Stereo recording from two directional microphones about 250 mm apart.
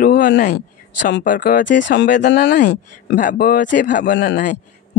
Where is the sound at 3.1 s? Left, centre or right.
Left.